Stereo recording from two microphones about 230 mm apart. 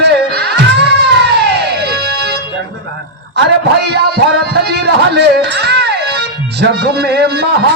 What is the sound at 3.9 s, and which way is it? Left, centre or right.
Music, right.